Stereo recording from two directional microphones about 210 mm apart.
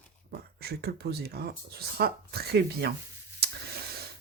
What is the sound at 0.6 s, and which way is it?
Speech, 50° right (ahead or behind).